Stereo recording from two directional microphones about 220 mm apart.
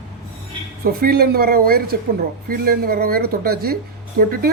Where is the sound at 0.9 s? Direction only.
45° right (ahead or behind).